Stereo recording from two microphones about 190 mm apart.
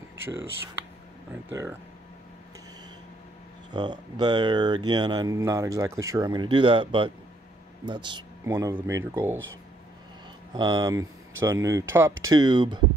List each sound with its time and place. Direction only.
1.3 s speech: 10° right (ahead or behind)
3.7 s speech: 25° right (ahead or behind)
10.5 s speech: 20° right (ahead or behind)